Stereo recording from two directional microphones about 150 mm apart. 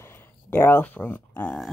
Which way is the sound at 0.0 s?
15° left (ahead or behind).